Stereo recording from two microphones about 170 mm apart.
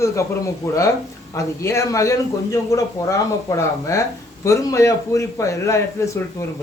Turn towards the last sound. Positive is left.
turn(degrees=15)  # may be behind; listen again after turning